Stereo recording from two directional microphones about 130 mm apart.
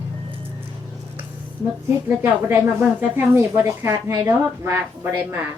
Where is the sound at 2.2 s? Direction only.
15° right (ahead or behind).